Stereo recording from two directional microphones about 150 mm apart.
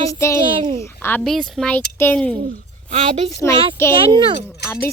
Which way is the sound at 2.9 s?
45° right (ahead or behind).